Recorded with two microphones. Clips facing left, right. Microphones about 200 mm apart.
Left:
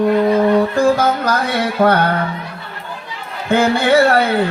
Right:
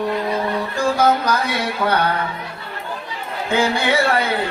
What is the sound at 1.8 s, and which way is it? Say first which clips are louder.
Music: left 8 dB; 50° left (ahead or behind).